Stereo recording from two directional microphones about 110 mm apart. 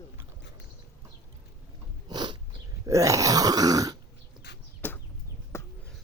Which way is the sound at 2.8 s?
30° right (ahead or behind).